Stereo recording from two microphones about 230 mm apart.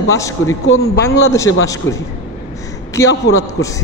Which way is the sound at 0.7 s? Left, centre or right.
Left.